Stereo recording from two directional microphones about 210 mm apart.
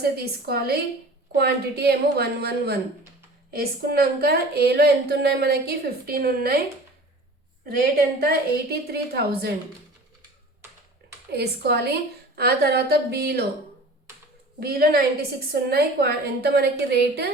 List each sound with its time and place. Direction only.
0.0 s a woman's voice: 50° right (ahead or behind)
8.2 s a woman's voice: 50° right (ahead or behind)
11.3 s a woman's voice: 50° right (ahead or behind)
14.6 s a woman's voice: 45° right (ahead or behind)